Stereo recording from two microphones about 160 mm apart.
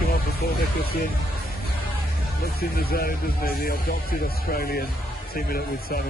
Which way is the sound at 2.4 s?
70° left (ahead or behind).